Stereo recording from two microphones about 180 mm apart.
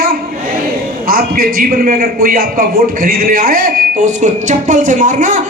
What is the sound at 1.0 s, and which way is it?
A man's voice, 55° right (ahead or behind).